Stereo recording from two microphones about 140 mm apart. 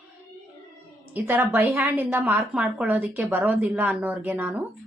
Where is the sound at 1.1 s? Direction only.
15° right (ahead or behind).